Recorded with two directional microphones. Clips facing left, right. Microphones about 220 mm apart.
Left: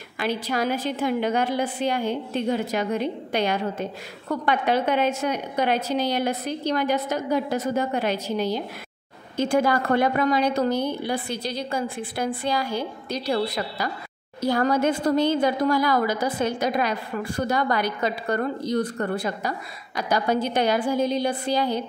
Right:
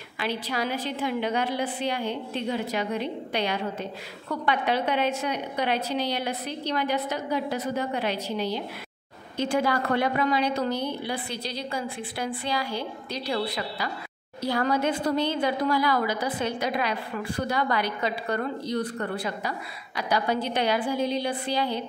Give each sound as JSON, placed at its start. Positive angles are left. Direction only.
{"t": 0.2, "sound": "a woman's voice", "side_deg": 45}